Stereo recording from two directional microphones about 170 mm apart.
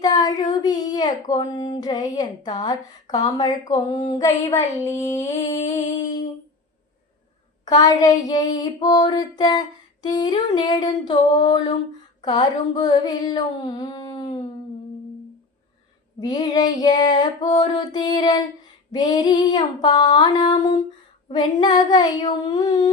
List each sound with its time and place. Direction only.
0.0 s child singing: 25° left (ahead or behind)
0.6 s female singing: 25° left (ahead or behind)
7.6 s female singing: 20° left (ahead or behind)
16.2 s female singing: 25° left (ahead or behind)